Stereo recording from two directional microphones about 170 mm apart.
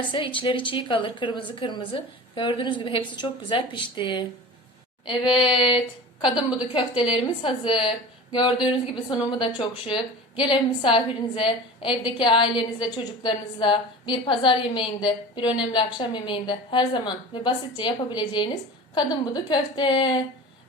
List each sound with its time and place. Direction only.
0.1 s a woman's voice: 30° left (ahead or behind)